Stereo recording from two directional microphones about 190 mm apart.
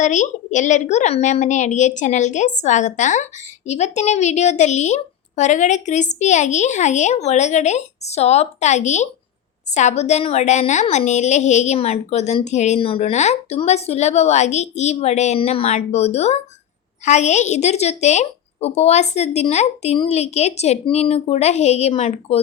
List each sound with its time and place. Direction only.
0.0 s a woman's voice: 40° left (ahead or behind)